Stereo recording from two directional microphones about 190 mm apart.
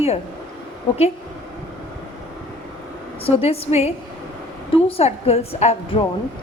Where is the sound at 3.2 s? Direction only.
30° left (ahead or behind).